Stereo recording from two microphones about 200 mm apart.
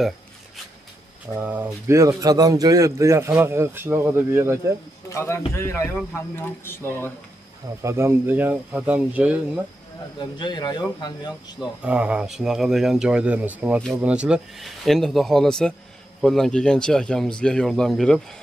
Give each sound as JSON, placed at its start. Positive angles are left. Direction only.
{"t": 1.3, "sound": "speech", "side_deg": -10}
{"t": 5.1, "sound": "a man's voice", "side_deg": 15}
{"t": 7.8, "sound": "speech", "side_deg": -15}
{"t": 10.1, "sound": "speech", "side_deg": 25}
{"t": 11.6, "sound": "speech", "side_deg": -5}